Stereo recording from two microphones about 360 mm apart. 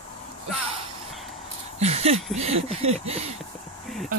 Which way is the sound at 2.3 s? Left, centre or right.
Centre.